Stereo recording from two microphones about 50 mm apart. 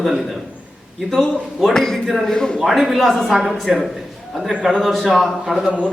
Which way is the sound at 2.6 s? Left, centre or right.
Centre.